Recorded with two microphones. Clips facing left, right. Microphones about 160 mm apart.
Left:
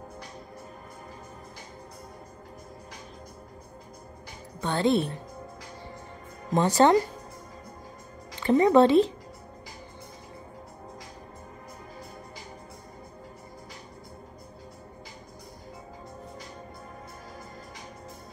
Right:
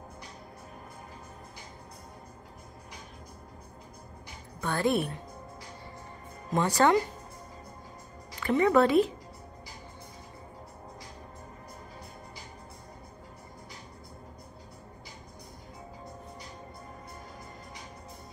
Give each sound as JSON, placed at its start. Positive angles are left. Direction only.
{"t": 4.6, "sound": "a woman's voice", "side_deg": 25}
{"t": 6.5, "sound": "speech", "side_deg": 25}
{"t": 8.4, "sound": "speech", "side_deg": 30}